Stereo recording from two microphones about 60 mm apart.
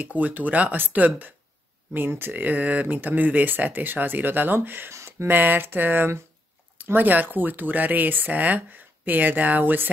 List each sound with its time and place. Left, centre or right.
0.0 s speech: right
5.4 s speech: right